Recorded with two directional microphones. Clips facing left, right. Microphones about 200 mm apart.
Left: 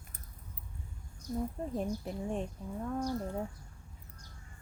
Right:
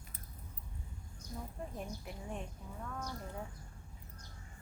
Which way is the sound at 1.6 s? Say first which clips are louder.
Left 9 dB; 30° left (ahead or behind).